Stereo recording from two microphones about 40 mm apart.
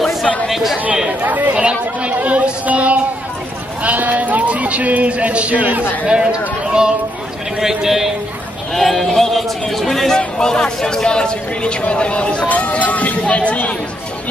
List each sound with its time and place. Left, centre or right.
0.0 s chatter: centre
1.2 s chatter: right
1.5 s a sound: right
3.8 s sheep: right
6.6 s a sound: right
7.6 s a man's voice: centre
8.7 s a sound: centre
10.4 s speech: centre
12.4 s speech: left